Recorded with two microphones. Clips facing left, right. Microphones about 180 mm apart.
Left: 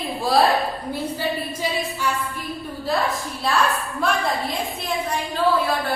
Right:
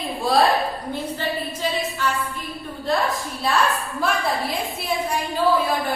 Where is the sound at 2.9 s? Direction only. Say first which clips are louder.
Right 1 dB; centre (ahead or behind).